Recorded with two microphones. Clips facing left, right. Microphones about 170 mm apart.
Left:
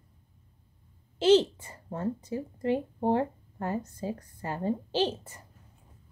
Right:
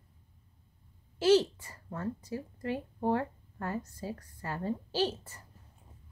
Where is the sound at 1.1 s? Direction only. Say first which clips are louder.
Left 3 dB; 20° left (ahead or behind).